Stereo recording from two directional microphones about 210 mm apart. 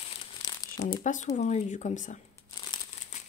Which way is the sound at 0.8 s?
35° left (ahead or behind).